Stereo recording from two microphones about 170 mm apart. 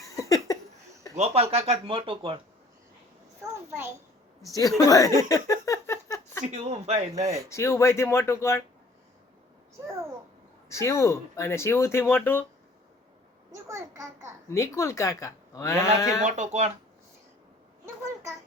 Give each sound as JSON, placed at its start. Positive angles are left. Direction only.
{"t": 0.0, "sound": "a sound", "side_deg": 20}
{"t": 1.1, "sound": "speech", "side_deg": -40}
{"t": 3.7, "sound": "a child's voice", "side_deg": -10}
{"t": 4.9, "sound": "speech", "side_deg": 20}
{"t": 5.3, "sound": "a sound", "side_deg": 20}
{"t": 6.4, "sound": "speech", "side_deg": -40}
{"t": 7.5, "sound": "speech", "side_deg": 15}
{"t": 9.7, "sound": "a child's voice", "side_deg": -15}
{"t": 10.7, "sound": "speech", "side_deg": 15}
{"t": 13.5, "sound": "a sound", "side_deg": -15}
{"t": 14.5, "sound": "speech", "side_deg": 15}
{"t": 16.2, "sound": "speech", "side_deg": -45}
{"t": 17.8, "sound": "a sound", "side_deg": -20}